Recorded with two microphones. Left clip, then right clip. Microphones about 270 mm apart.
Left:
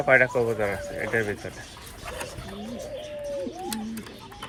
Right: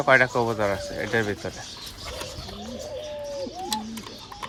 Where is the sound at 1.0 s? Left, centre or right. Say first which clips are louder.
Even; right.